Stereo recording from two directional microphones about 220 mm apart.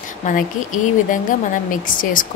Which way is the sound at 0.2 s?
35° left (ahead or behind).